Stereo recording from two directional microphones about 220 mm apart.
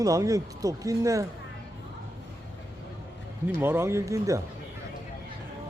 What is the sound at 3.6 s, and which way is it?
Speech, 10° right (ahead or behind).